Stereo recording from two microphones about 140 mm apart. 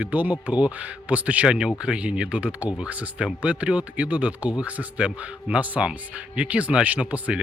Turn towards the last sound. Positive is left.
turn(degrees=-10)  # may be behind; listen again after turning